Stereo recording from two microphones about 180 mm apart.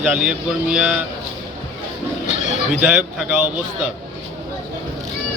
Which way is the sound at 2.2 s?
40° left (ahead or behind).